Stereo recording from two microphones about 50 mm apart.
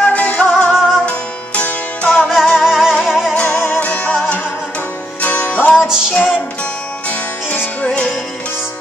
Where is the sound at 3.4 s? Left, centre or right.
Left.